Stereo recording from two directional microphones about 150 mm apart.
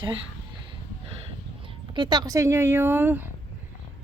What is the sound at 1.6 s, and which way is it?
Speech, 30° right (ahead or behind).